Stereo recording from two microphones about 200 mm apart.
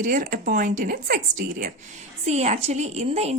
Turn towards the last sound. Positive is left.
turn(degrees=-30)  # may be behind; listen again after turning